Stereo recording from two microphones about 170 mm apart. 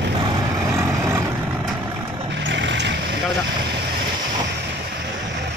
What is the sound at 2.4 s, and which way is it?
Vehicle, 90° right.